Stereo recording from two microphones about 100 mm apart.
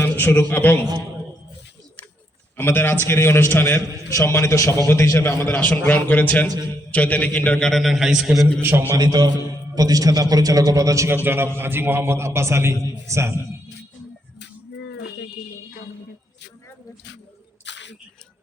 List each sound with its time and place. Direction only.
0.0 s a man's voice: 20° left (ahead or behind)
2.6 s a man's voice: 20° left (ahead or behind); by 8.4 s 5° right (ahead or behind)
8.6 s a man's voice: 20° right (ahead or behind)
9.0 s a man's voice: 45° right (ahead or behind); by 13.4 s 30° right (ahead or behind)